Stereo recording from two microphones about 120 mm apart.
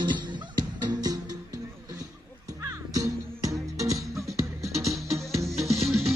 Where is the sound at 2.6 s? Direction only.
25° right (ahead or behind).